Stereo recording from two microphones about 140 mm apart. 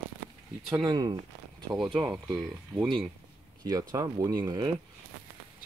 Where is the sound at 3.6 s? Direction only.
25° right (ahead or behind).